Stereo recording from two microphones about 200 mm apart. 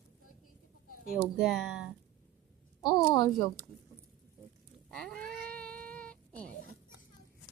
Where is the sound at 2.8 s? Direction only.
20° left (ahead or behind).